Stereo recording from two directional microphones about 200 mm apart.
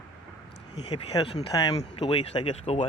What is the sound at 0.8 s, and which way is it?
Speech, 30° left (ahead or behind).